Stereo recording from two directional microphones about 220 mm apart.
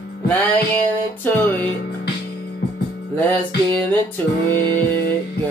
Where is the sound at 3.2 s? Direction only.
5° left (ahead or behind).